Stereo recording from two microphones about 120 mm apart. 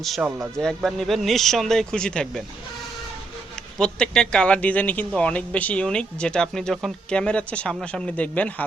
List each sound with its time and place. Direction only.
0.2 s speech: 15° right (ahead or behind)
0.5 s a man's voice: 5° left (ahead or behind)
3.8 s a man's voice: 5° left (ahead or behind)